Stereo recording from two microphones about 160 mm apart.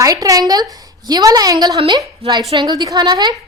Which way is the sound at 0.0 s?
20° right (ahead or behind).